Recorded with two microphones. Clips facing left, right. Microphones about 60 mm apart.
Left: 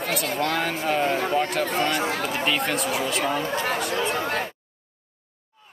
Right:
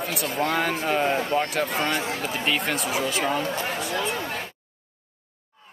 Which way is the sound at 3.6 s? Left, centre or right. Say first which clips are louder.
Left 2 dB; left.